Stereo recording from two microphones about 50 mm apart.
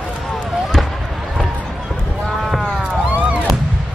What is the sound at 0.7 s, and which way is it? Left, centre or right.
Fireworks, centre.